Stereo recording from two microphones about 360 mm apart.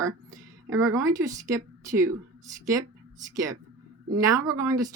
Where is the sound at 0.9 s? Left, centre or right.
Centre.